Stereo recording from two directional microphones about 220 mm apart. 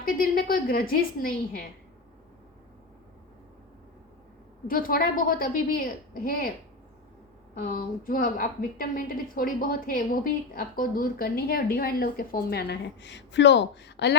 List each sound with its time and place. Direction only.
0.0 s a woman's voice: 40° left (ahead or behind)
4.7 s a woman's voice: 40° left (ahead or behind)
7.7 s a woman's voice: 40° left (ahead or behind)